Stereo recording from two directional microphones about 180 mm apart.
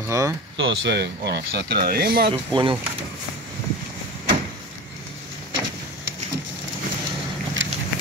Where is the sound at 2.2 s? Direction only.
30° right (ahead or behind).